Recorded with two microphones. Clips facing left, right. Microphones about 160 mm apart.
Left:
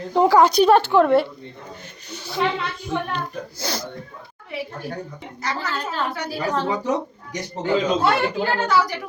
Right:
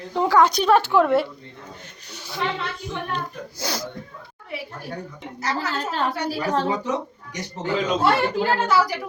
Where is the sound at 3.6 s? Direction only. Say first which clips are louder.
Even; 10° right (ahead or behind).